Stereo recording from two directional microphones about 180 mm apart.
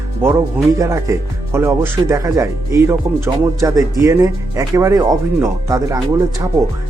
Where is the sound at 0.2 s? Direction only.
10° right (ahead or behind).